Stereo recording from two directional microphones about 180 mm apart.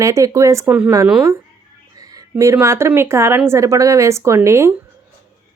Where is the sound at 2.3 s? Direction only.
15° right (ahead or behind).